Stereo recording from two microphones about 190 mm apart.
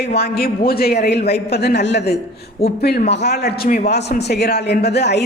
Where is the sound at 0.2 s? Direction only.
55° left (ahead or behind).